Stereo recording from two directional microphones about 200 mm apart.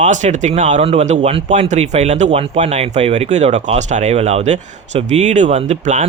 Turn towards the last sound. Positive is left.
turn(degrees=-35)  # may be behind; listen again after turning